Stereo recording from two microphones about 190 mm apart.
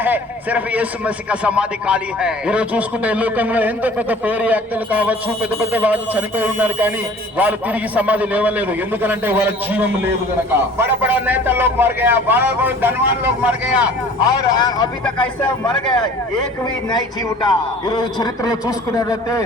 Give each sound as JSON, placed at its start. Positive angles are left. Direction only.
{"t": 0.0, "sound": "a man's voice", "side_deg": -10}
{"t": 14.3, "sound": "a man's voice", "side_deg": 20}
{"t": 17.4, "sound": "a man's voice", "side_deg": 25}